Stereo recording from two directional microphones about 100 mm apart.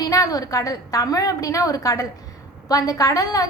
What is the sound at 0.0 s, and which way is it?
A woman's voice, 35° left (ahead or behind).